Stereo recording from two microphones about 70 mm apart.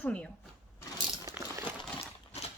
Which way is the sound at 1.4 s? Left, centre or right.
Right.